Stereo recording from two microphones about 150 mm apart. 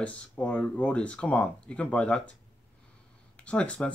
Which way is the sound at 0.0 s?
10° left (ahead or behind).